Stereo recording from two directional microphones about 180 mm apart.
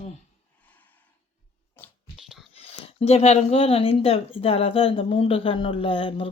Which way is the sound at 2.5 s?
35° left (ahead or behind).